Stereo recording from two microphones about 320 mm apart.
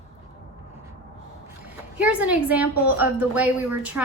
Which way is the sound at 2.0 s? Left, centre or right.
Centre.